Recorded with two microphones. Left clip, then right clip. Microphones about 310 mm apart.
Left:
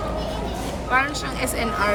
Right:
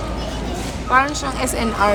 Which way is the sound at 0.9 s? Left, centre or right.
Centre.